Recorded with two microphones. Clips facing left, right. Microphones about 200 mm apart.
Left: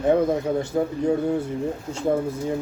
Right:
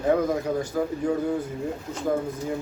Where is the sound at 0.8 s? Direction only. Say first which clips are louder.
Left 3 dB; 25° left (ahead or behind).